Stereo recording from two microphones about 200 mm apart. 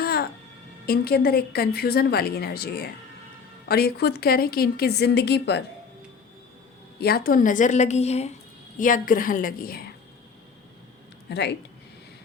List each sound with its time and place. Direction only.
0.0 s music: 50° left (ahead or behind)
0.9 s speech: 50° left (ahead or behind)
7.0 s a woman's voice: 50° left (ahead or behind)
11.3 s speech: 55° left (ahead or behind)